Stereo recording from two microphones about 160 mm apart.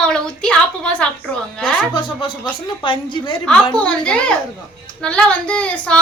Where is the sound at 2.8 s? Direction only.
30° left (ahead or behind).